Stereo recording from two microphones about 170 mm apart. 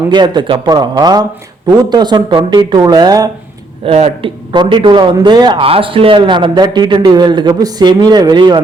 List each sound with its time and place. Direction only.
0.1 s a man's voice: 25° right (ahead or behind)
3.8 s a man's voice: 35° right (ahead or behind)